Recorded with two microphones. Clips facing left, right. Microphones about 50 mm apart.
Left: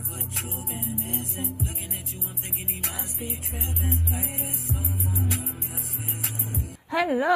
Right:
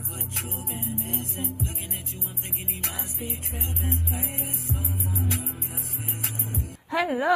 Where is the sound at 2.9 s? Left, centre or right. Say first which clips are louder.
Even; centre.